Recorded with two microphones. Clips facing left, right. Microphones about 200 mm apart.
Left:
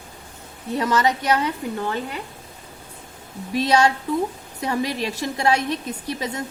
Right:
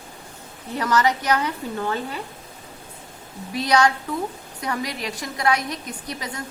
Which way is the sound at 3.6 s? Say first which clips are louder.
Left 1 dB; 25° left (ahead or behind).